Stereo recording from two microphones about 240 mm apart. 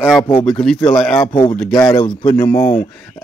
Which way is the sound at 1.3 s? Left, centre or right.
Left.